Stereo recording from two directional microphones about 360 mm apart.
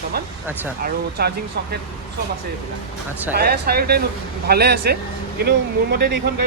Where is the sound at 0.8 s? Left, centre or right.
Right.